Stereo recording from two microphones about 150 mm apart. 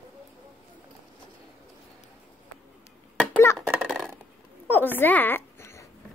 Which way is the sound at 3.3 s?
20° left (ahead or behind).